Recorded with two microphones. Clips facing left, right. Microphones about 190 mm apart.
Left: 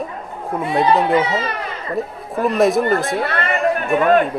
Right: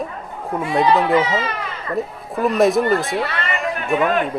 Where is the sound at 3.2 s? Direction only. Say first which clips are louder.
Left 4 dB; 50° left (ahead or behind).